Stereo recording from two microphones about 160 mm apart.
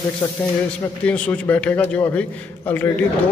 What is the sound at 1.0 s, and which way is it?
A man's voice, 10° left (ahead or behind).